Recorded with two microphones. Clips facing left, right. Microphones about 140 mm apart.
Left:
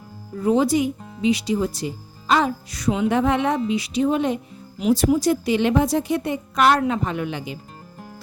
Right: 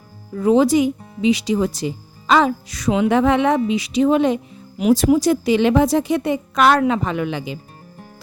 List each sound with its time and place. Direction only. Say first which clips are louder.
0.4 s speech: right 4 dB; 90° right
4.8 s speech: right 4 dB; 80° right